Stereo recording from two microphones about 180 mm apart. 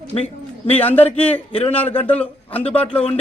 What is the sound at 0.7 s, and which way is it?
A man's voice, 10° left (ahead or behind).